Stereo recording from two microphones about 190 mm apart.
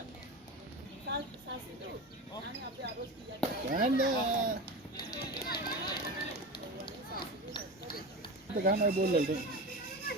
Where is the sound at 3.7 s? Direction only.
45° right (ahead or behind).